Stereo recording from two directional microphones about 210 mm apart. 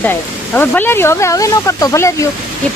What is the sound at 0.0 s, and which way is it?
Speech, 10° left (ahead or behind).